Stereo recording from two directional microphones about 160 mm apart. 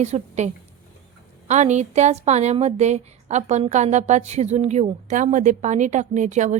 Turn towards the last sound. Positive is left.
turn(degrees=-50)  # may be behind; listen again after turning